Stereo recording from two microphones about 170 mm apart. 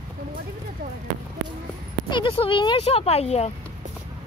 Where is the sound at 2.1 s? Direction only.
30° left (ahead or behind).